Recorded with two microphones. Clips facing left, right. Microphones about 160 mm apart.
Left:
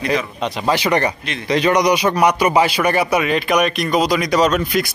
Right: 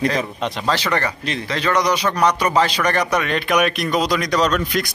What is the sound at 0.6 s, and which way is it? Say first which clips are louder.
A man's voice: left 5 dB; 15° left (ahead or behind).